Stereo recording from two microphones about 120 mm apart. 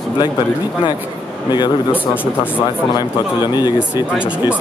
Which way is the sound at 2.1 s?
15° left (ahead or behind).